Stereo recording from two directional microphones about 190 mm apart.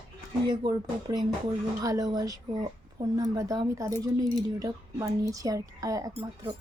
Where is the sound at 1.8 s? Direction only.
20° right (ahead or behind).